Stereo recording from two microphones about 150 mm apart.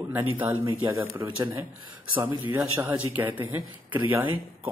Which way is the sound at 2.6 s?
10° right (ahead or behind).